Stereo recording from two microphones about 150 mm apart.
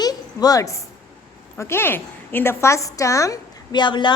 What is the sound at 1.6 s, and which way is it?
A woman's voice, 15° left (ahead or behind).